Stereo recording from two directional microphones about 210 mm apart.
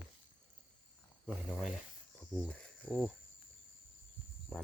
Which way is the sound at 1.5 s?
5° left (ahead or behind).